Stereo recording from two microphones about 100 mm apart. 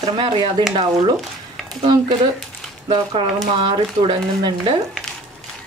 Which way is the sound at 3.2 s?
55° right (ahead or behind).